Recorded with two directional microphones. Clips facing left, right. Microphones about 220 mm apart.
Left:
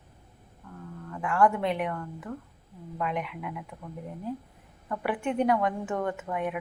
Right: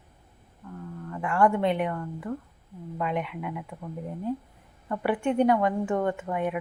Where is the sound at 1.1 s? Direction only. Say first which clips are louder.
Right 1 dB; 5° right (ahead or behind).